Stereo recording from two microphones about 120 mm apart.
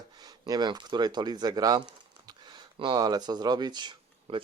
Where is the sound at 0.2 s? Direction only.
30° right (ahead or behind).